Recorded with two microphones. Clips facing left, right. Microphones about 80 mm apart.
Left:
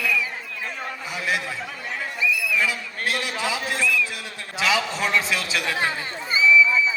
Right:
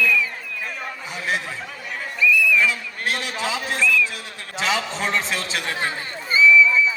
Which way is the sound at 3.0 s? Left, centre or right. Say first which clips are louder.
Even; right.